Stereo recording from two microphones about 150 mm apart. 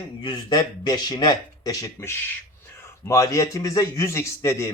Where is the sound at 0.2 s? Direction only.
30° left (ahead or behind).